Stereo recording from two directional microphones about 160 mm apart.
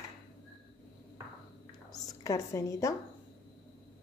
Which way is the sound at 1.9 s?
20° left (ahead or behind).